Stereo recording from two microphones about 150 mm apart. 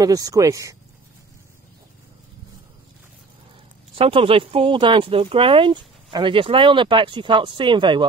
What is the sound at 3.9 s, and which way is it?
Speech, 35° right (ahead or behind).